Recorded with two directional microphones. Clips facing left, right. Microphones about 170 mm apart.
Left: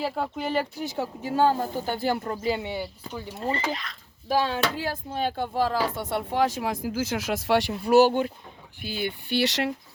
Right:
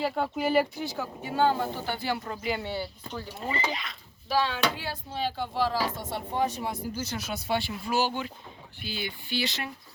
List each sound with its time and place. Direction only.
0.0 s speech: 5° right (ahead or behind)
0.9 s speech: 35° left (ahead or behind)
2.6 s speech: 15° left (ahead or behind)
3.4 s speech: centre (ahead or behind)
4.3 s speech: 45° left (ahead or behind); by 7.6 s 90° left
7.9 s speech: 65° left (ahead or behind); by 9.7 s 80° left